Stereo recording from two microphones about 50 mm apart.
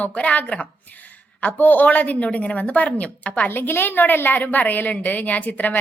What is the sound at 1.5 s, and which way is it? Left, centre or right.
A woman's voice, left.